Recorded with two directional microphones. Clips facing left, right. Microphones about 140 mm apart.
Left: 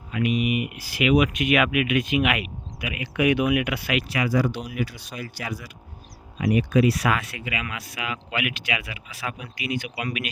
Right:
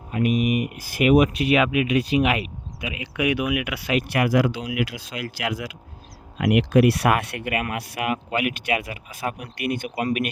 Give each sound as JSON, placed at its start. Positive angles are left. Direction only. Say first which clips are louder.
{"t": 0.1, "sound": "speech", "louder": "right 2 dB", "side_deg": -45}
{"t": 3.2, "sound": "speech", "louder": "left 2 dB", "side_deg": -10}
{"t": 4.1, "sound": "speech", "louder": "right 3 dB", "side_deg": -75}
{"t": 5.4, "sound": "speech", "louder": "right 6 dB", "side_deg": -70}
{"t": 7.0, "sound": "speech", "louder": "right 4 dB", "side_deg": -60}
{"t": 8.3, "sound": "speech", "louder": "right 5 dB", "side_deg": -40}